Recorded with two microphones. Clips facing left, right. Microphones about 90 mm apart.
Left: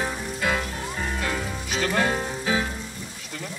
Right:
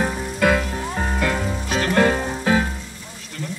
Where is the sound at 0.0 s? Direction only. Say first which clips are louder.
Right 7 dB; 60° right (ahead or behind).